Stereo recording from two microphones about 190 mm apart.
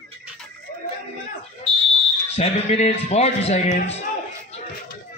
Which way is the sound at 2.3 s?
35° left (ahead or behind).